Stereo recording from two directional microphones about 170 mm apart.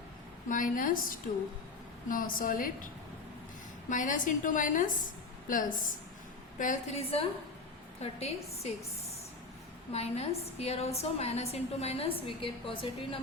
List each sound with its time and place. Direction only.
0.4 s a woman's voice: 50° left (ahead or behind)
9.9 s a woman's voice: 40° left (ahead or behind)